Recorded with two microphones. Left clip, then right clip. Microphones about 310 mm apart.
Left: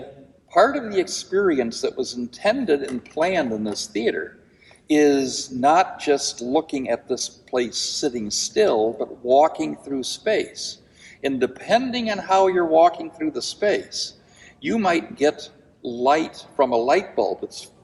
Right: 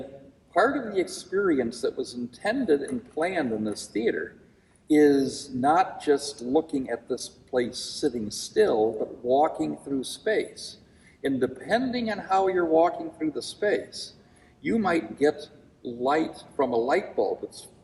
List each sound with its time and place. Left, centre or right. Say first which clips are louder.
0.5 s a man's voice: left 6 dB; centre